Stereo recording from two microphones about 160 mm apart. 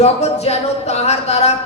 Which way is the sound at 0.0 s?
40° left (ahead or behind).